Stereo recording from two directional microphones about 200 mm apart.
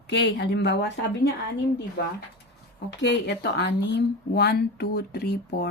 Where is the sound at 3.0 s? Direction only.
60° left (ahead or behind).